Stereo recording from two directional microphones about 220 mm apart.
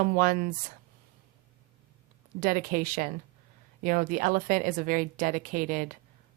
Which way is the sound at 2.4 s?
40° right (ahead or behind).